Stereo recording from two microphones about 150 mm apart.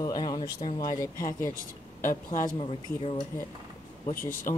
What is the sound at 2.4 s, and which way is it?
Speech, 35° left (ahead or behind).